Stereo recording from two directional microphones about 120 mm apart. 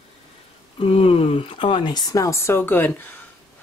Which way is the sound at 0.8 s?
55° left (ahead or behind).